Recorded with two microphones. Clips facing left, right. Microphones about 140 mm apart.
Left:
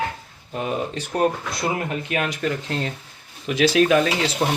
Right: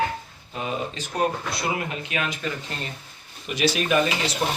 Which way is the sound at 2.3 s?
80° left.